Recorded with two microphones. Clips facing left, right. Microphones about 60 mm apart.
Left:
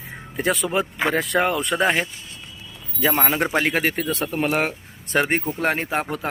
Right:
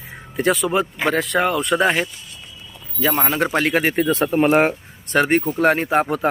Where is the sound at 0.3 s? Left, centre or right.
Centre.